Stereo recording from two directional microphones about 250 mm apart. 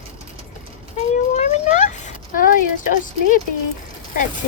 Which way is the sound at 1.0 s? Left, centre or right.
Left.